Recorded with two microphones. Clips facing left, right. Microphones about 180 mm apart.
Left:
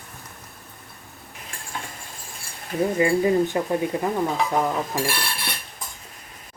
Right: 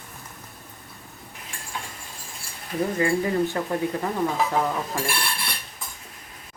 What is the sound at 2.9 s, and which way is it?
Speech, 20° left (ahead or behind).